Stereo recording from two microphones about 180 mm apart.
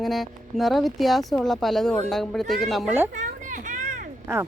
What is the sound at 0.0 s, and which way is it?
Speech, centre (ahead or behind).